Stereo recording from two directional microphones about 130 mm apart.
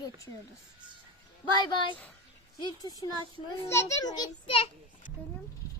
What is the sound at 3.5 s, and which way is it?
A child's voice, 25° left (ahead or behind).